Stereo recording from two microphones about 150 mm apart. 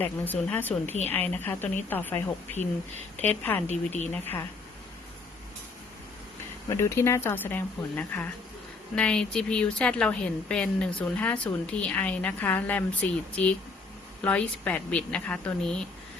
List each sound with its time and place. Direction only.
0.0 s speech: 10° left (ahead or behind)
3.7 s speech: 50° left (ahead or behind)
4.1 s speech: 15° left (ahead or behind)
6.7 s speech: 20° left (ahead or behind)